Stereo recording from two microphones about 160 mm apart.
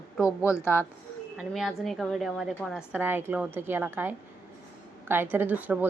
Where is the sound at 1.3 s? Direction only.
Centre (ahead or behind).